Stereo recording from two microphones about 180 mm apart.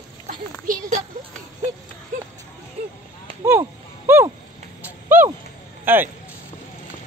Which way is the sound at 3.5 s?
10° right (ahead or behind).